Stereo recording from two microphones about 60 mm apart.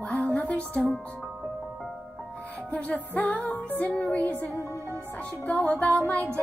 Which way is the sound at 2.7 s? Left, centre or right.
Left.